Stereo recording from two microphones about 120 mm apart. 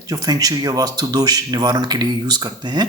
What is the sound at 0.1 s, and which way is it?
Speech, 30° right (ahead or behind).